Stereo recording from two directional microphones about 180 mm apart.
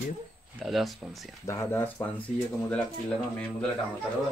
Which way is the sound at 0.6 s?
Centre (ahead or behind).